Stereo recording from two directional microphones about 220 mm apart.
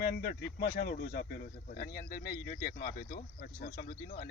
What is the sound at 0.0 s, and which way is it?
Speech, 45° left (ahead or behind).